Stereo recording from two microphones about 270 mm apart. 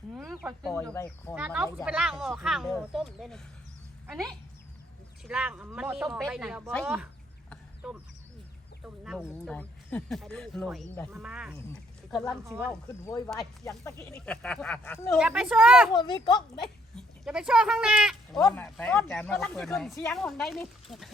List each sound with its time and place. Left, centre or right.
0.1 s a child's voice: centre
1.4 s speech: centre
7.5 s a sound: centre
8.8 s speech: centre
15.2 s speech: centre
15.9 s a child's voice: centre
16.9 s speech: centre
18.3 s speech: centre